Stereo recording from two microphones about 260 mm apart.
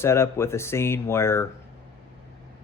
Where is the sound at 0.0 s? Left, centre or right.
Centre.